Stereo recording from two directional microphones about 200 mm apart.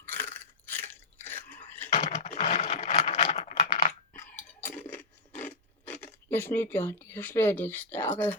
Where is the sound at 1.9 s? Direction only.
35° left (ahead or behind).